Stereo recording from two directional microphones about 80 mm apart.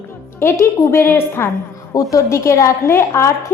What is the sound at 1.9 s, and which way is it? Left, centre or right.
A woman's voice, left.